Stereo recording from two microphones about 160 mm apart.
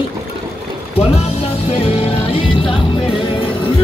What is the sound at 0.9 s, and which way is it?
Music, 40° left (ahead or behind).